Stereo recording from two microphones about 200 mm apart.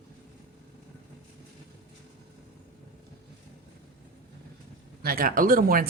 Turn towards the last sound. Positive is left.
turn(degrees=-45)  # may be behind; listen again after turning